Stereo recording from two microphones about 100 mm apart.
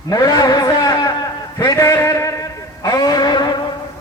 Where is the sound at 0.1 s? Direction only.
40° left (ahead or behind).